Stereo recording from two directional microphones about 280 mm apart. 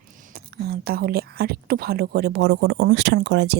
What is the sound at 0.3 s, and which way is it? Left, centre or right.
A woman's voice, right.